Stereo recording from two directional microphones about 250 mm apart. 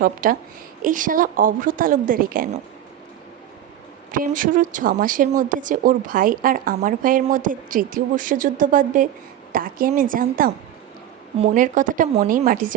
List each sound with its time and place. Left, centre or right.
0.0 s a woman's voice: right
4.1 s a woman's voice: right